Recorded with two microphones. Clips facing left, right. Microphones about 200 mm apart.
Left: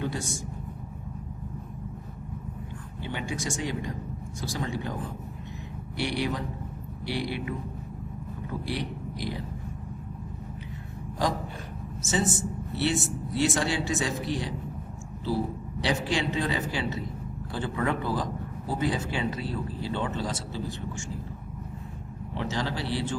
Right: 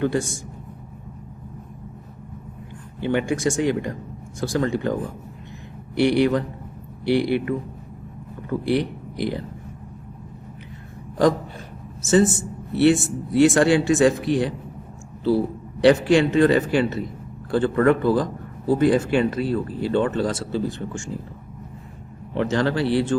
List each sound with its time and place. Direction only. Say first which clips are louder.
0.0 s speech: right 10 dB; 60° right (ahead or behind)
3.0 s speech: right 12 dB; 60° right (ahead or behind)
6.0 s speech: right 11 dB; 60° right (ahead or behind)
8.6 s speech: right 12 dB; 60° right (ahead or behind)
12.0 s a man's voice: right 10 dB; 50° right (ahead or behind)
15.8 s speech: right 13 dB; 55° right (ahead or behind)
22.4 s speech: right 10 dB; 60° right (ahead or behind)